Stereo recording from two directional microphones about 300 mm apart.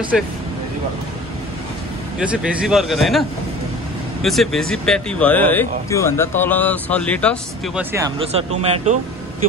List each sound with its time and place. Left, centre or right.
0.1 s speech: centre
2.1 s speech: centre
8.2 s speech: centre